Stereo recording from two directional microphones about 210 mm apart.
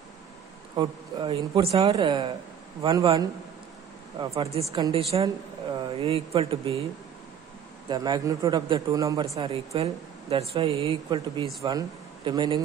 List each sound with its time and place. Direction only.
0.7 s speech: 25° right (ahead or behind)
4.2 s speech: 30° right (ahead or behind)
7.9 s a man's voice: 20° right (ahead or behind)